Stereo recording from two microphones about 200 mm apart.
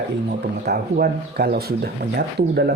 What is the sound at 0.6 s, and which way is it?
Speech, 50° right (ahead or behind).